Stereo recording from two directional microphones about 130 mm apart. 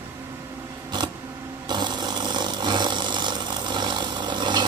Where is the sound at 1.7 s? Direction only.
35° right (ahead or behind).